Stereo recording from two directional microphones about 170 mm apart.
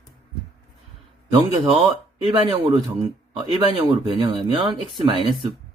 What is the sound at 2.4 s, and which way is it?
Speech, 30° right (ahead or behind).